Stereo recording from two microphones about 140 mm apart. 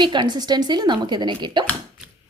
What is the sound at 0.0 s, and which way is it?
Speech, 35° right (ahead or behind).